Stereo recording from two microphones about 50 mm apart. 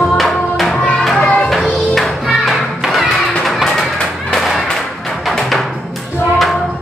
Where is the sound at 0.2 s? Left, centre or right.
Centre.